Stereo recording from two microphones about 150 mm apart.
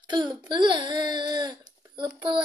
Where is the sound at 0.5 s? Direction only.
30° right (ahead or behind).